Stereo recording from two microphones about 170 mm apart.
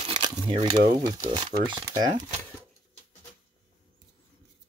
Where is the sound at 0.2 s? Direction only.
30° right (ahead or behind).